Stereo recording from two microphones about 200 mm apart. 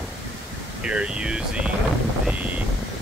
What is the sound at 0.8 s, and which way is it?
Speech, 5° right (ahead or behind).